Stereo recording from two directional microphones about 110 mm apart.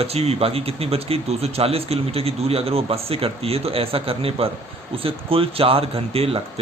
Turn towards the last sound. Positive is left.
turn(degrees=-60)  # may be behind; listen again after turning